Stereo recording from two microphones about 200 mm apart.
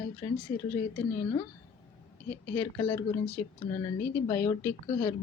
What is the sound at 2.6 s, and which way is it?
Speech, 15° left (ahead or behind).